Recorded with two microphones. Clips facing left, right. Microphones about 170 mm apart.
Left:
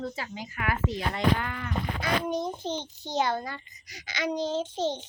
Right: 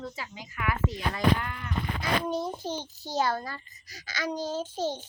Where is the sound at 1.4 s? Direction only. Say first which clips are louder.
Left 3 dB; 90° left.